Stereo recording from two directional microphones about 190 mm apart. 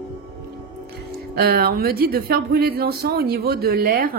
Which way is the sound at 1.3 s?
55° right (ahead or behind).